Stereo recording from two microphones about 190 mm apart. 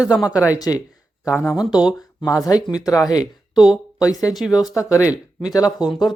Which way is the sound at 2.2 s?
15° left (ahead or behind).